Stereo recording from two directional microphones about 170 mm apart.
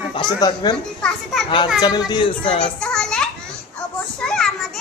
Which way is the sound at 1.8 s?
25° left (ahead or behind).